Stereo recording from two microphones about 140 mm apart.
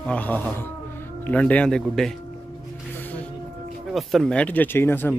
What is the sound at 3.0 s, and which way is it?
Music, 10° left (ahead or behind).